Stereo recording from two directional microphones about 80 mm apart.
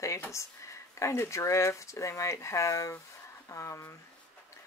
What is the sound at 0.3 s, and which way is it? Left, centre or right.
Speech, left.